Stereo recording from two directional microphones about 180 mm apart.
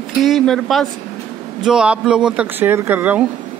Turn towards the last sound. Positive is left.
turn(degrees=-10)  # may be behind; listen again after turning